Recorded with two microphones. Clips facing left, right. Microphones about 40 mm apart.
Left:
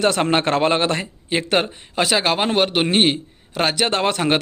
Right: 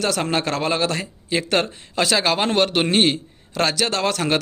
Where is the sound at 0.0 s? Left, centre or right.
Left.